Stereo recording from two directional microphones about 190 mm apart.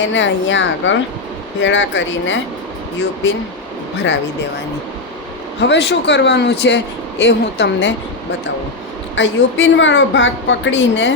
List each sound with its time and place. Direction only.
0.1 s speech: 75° left (ahead or behind)
5.5 s speech: 65° left (ahead or behind)
9.1 s speech: 75° left (ahead or behind)